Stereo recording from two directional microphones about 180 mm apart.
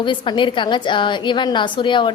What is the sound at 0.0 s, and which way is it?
A woman's voice, 25° left (ahead or behind).